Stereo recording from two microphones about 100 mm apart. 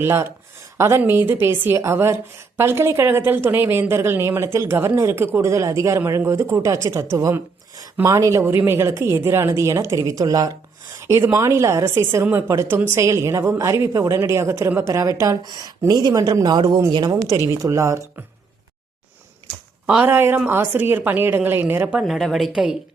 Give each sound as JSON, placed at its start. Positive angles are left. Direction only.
{"t": 0.0, "sound": "a woman's voice", "side_deg": -25}
{"t": 17.6, "sound": "a woman's voice", "side_deg": -30}
{"t": 20.1, "sound": "a woman's voice", "side_deg": -20}
{"t": 22.0, "sound": "speech", "side_deg": 0}